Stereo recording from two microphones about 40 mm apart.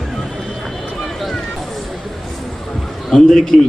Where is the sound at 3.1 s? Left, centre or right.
Centre.